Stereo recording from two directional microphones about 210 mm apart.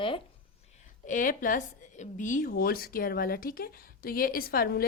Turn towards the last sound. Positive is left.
turn(degrees=45)  # may be behind; listen again after turning